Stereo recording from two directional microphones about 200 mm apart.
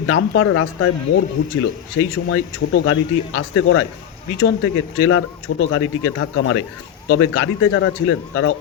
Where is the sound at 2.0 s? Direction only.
90° left.